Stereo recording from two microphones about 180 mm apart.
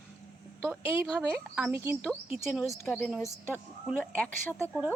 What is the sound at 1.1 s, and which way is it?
Speech, 5° right (ahead or behind).